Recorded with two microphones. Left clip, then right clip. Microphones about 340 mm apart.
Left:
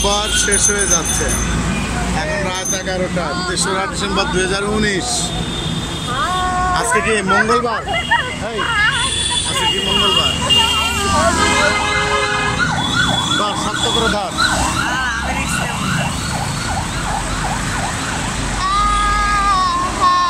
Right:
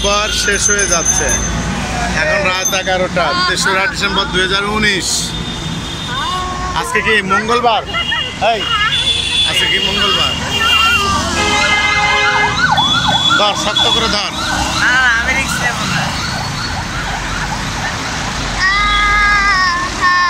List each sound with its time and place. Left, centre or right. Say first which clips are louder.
0.0 s speech: right 2 dB; centre
3.6 s speech: right 5 dB; centre
19.5 s child singing: right 2 dB; centre